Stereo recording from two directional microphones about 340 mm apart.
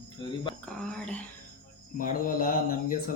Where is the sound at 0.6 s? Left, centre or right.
Centre.